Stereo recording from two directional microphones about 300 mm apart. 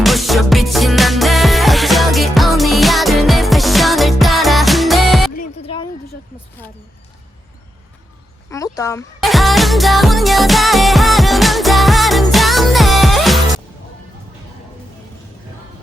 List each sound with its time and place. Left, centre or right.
0.0 s music: centre
5.4 s music: centre
8.4 s music: centre